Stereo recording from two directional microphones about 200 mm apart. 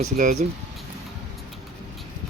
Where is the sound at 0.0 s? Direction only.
40° right (ahead or behind).